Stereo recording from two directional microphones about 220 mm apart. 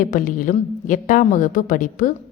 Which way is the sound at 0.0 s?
40° left (ahead or behind).